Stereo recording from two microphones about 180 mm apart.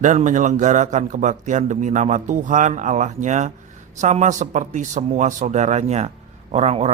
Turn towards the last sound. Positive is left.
turn(degrees=-35)  # may be behind; listen again after turning